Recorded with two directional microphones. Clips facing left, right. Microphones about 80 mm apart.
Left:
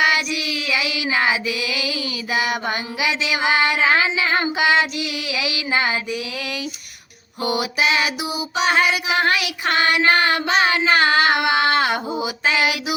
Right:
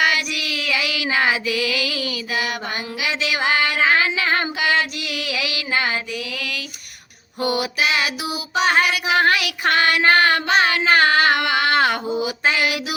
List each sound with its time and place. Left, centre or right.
0.0 s child singing: left
1.1 s female singing: left
4.4 s child singing: left
5.0 s female singing: left
8.5 s child singing: right
8.8 s child singing: left
9.3 s female singing: left
10.1 s child singing: left
10.9 s a sound: left